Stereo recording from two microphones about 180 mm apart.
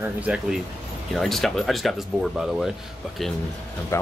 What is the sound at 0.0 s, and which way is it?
Speech, 5° right (ahead or behind).